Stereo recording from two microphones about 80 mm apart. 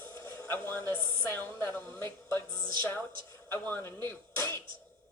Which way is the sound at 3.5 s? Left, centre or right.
Left.